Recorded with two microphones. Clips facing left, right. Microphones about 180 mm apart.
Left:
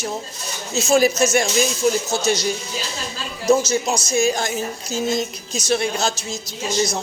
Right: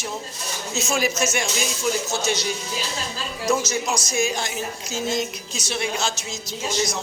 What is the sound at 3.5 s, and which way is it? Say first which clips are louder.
A man's voice: left 6 dB; 25° left (ahead or behind).